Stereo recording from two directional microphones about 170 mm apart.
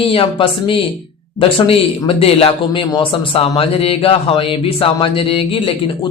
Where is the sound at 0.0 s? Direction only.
35° left (ahead or behind).